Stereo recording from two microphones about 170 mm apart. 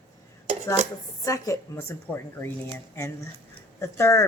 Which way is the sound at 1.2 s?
20° left (ahead or behind).